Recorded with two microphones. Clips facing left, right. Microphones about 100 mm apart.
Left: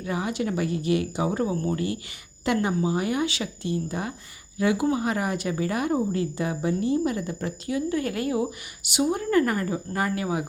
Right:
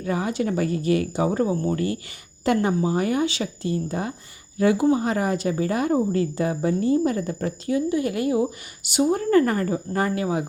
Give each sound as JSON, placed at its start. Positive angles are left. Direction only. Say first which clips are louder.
{"t": 0.0, "sound": "a woman's voice", "louder": "right 3 dB", "side_deg": -40}
{"t": 7.9, "sound": "a woman's voice", "louder": "right 3 dB", "side_deg": -20}
{"t": 8.8, "sound": "a woman's voice", "louder": "right 4 dB", "side_deg": -35}